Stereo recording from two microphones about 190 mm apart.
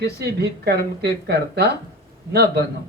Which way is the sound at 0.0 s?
60° right (ahead or behind).